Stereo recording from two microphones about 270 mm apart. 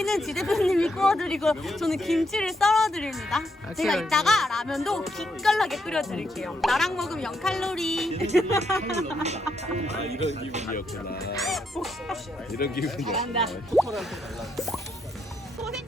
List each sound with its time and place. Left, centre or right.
0.0 s speech: centre
8.1 s speech: right
10.7 s speech: left
11.4 s speech: centre
12.5 s speech: left
12.8 s speech: centre